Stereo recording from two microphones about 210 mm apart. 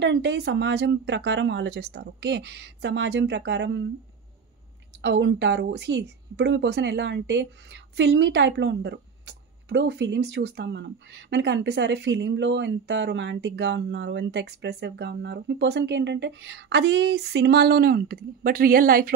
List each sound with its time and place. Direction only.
0.0 s a woman's voice: 60° right (ahead or behind)
5.0 s a woman's voice: 55° right (ahead or behind)